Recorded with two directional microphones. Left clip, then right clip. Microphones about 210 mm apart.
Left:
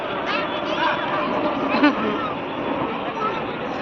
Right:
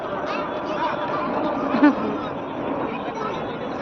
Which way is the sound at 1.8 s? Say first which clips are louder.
Right 1 dB; 45° right (ahead or behind).